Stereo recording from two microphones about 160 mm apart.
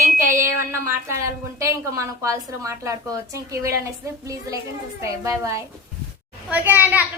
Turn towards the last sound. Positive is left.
turn(degrees=-10)  # may be behind; listen again after turning